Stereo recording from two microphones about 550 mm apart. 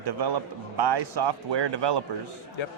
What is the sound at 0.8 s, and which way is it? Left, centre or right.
Speech, right.